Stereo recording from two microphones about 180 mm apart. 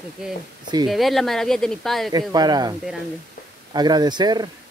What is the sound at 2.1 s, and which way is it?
Speech, 20° right (ahead or behind).